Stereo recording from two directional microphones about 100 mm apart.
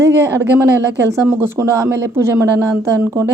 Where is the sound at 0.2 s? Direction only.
25° right (ahead or behind).